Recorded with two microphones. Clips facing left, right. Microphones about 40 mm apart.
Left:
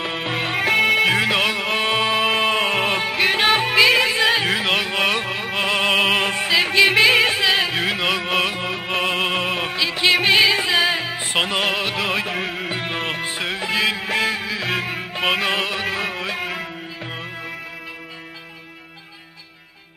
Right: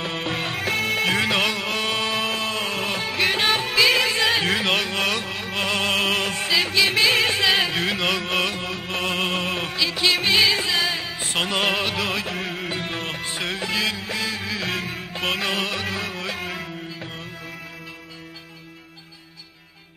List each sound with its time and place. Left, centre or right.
0.0 s music: centre
3.1 s music: centre
11.4 s music: centre
14.0 s a sound: left
14.4 s music: centre